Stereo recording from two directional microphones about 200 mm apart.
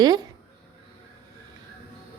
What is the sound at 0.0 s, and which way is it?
Speech, 20° right (ahead or behind).